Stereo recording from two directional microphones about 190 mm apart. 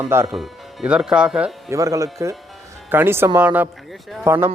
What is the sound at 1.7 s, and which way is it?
Speech, 15° right (ahead or behind).